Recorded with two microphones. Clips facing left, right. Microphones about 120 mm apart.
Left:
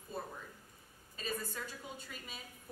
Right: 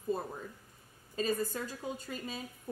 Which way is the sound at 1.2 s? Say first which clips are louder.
Right 8 dB; 40° right (ahead or behind).